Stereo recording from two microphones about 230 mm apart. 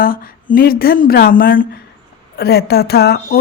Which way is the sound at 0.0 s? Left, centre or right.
Left.